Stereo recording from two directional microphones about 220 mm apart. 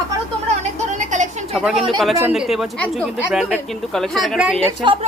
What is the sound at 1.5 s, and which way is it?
Speech, centre (ahead or behind).